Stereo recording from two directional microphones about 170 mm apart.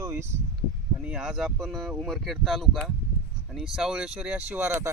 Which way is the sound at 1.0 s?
5° right (ahead or behind).